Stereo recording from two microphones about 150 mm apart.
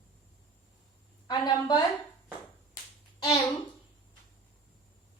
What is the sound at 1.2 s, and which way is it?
Speech, 30° left (ahead or behind).